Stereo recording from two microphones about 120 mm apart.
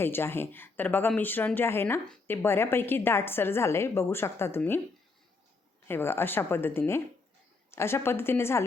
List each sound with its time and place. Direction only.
0.0 s a woman's voice: 20° left (ahead or behind)
5.9 s a woman's voice: 20° left (ahead or behind)